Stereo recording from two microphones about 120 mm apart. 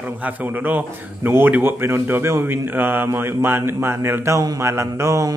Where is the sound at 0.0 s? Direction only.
15° right (ahead or behind).